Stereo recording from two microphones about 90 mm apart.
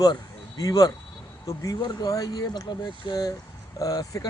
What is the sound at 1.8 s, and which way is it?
Speech, 50° left (ahead or behind).